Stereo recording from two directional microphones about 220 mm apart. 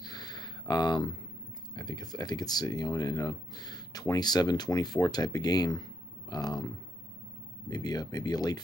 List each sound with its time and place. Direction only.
0.0 s a sound: 20° left (ahead or behind)
1.8 s speech: 20° left (ahead or behind)
7.7 s speech: 15° left (ahead or behind)